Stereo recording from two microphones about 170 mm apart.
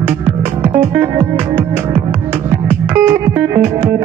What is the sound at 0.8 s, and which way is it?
Music, 15° right (ahead or behind).